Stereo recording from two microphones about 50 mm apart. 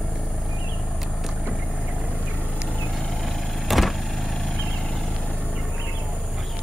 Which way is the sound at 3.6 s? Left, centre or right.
Centre.